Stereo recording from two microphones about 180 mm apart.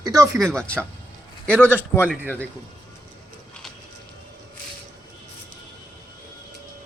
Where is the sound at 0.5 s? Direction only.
5° left (ahead or behind).